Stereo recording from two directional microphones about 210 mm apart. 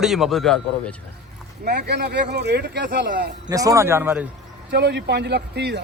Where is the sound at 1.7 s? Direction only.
50° right (ahead or behind).